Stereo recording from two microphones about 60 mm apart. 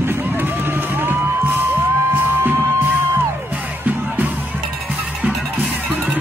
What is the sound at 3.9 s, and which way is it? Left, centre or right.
Music, right.